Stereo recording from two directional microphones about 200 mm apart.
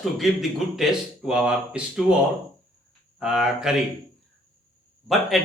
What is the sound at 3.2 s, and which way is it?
Speech, 5° right (ahead or behind).